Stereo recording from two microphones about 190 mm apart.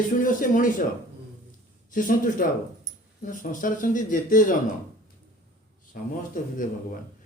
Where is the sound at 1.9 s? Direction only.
45° left (ahead or behind).